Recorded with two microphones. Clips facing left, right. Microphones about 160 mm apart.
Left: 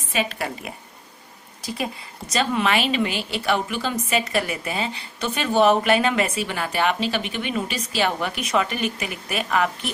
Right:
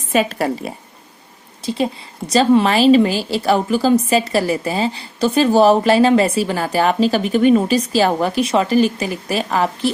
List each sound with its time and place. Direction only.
0.1 s a woman's voice: 40° right (ahead or behind)
1.6 s a woman's voice: 25° right (ahead or behind)